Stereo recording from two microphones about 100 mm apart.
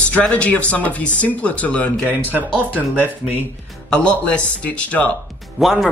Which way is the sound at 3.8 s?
10° left (ahead or behind).